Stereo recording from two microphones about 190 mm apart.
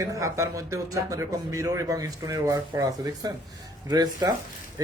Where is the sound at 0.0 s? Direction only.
15° right (ahead or behind).